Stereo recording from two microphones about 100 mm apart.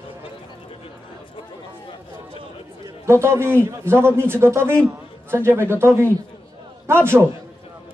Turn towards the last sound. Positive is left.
turn(degrees=-25)  # may be behind; listen again after turning